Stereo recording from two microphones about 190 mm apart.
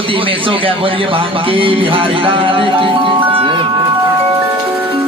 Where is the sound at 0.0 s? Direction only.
25° right (ahead or behind).